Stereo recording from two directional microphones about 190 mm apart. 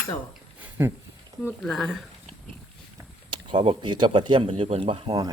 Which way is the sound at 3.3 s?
25° right (ahead or behind).